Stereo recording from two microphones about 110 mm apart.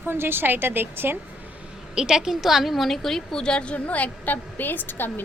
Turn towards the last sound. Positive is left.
turn(degrees=20)  # may be behind; listen again after turning